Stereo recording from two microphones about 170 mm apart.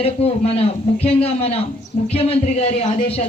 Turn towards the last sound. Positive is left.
turn(degrees=35)  # may be behind; listen again after turning